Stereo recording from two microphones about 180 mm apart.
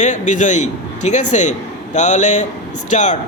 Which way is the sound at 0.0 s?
45° left (ahead or behind).